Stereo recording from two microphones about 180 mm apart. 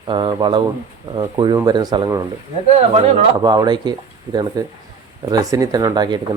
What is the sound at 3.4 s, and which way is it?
Speech, 20° right (ahead or behind).